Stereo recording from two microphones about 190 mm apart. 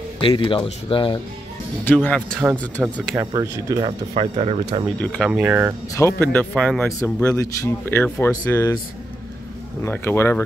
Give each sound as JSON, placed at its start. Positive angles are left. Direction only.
{"t": 0.2, "sound": "speech", "side_deg": 25}
{"t": 2.0, "sound": "speech", "side_deg": 5}
{"t": 3.3, "sound": "speech", "side_deg": -20}
{"t": 4.1, "sound": "speech", "side_deg": -30}
{"t": 4.9, "sound": "speech", "side_deg": 5}
{"t": 5.3, "sound": "speech", "side_deg": -10}
{"t": 5.9, "sound": "speech", "side_deg": 10}
{"t": 7.0, "sound": "speech", "side_deg": 15}
{"t": 9.8, "sound": "speech", "side_deg": 10}